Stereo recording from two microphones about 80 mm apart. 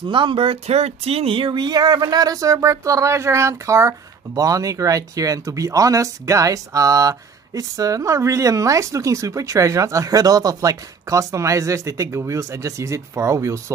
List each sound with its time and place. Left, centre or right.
0.1 s speech: right
1.3 s speech: right